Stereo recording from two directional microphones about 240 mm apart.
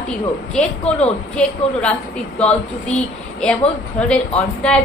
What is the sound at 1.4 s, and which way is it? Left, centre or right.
Speech, centre.